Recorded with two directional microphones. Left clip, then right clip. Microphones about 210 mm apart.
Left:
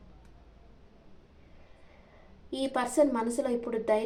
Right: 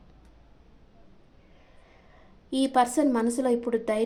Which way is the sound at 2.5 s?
55° right (ahead or behind).